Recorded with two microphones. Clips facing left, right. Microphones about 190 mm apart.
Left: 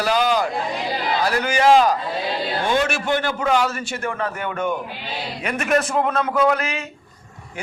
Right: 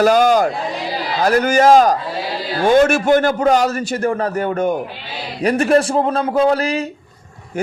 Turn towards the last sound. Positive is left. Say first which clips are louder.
# right 4 dB
turn(degrees=-35)  # may be behind; listen again after turning